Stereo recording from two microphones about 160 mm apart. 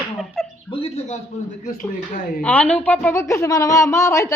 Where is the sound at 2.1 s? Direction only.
55° left (ahead or behind).